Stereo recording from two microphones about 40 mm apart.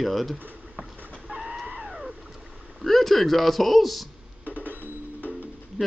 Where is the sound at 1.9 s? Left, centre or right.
Centre.